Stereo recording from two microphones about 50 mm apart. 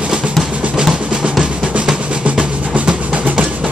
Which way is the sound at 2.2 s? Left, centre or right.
Right.